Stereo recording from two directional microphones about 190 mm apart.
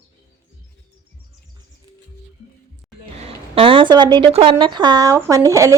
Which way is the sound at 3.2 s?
30° right (ahead or behind).